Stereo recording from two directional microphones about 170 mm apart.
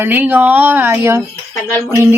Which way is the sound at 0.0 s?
10° right (ahead or behind).